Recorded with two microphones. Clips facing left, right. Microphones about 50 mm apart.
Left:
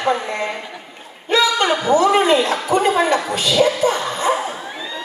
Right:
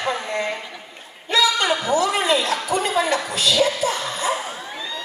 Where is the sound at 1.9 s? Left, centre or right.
Left.